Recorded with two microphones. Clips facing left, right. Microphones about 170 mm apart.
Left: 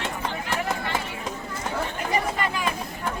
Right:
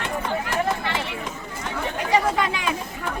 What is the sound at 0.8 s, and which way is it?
Clip-clop, 80° right.